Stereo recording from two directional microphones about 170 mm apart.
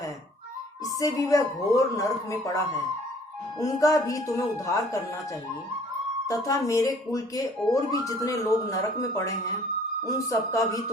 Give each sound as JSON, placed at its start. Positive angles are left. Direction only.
{"t": 0.9, "sound": "speech", "side_deg": 20}
{"t": 6.2, "sound": "speech", "side_deg": 20}